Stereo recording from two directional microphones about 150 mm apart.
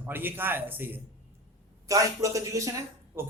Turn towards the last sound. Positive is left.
turn(degrees=-15)  # may be behind; listen again after turning